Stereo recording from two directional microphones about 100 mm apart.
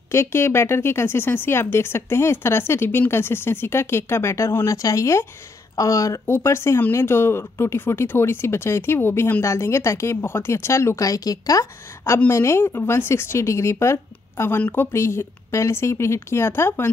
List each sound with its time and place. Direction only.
0.1 s speech: 25° left (ahead or behind)